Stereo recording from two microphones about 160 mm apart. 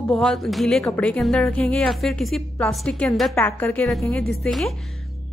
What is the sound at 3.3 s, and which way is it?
A woman's voice, 15° left (ahead or behind).